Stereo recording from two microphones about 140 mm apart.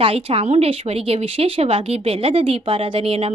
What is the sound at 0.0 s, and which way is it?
Speech, 40° right (ahead or behind).